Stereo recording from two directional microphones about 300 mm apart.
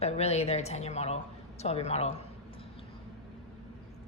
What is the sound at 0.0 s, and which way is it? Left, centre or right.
A woman's voice, left.